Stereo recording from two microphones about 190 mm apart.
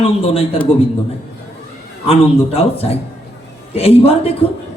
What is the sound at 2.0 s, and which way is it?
A man's voice, 30° left (ahead or behind).